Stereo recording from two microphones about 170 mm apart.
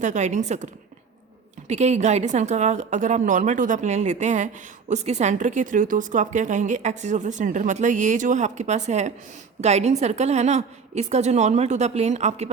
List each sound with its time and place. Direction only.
0.0 s a woman's voice: 45° right (ahead or behind)